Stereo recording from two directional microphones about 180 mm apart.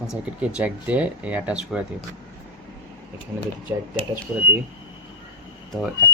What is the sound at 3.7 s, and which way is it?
Speech, 15° right (ahead or behind).